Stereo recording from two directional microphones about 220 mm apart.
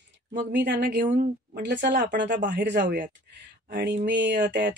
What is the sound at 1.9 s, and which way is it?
Speech, 35° right (ahead or behind).